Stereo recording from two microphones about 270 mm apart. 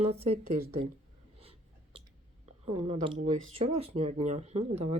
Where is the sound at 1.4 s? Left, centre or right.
Right.